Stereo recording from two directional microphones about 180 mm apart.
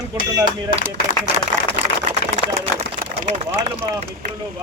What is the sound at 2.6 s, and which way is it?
Speech, 35° right (ahead or behind).